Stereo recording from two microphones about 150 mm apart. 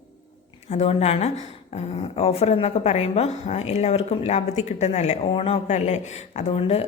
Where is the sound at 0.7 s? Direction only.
45° left (ahead or behind).